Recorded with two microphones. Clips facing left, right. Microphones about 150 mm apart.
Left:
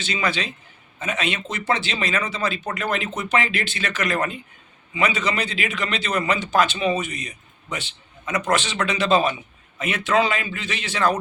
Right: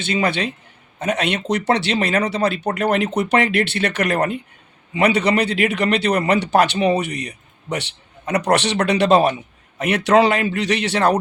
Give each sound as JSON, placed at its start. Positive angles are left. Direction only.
{"t": 0.0, "sound": "a man's voice", "side_deg": -55}
{"t": 0.9, "sound": "a man's voice", "side_deg": -70}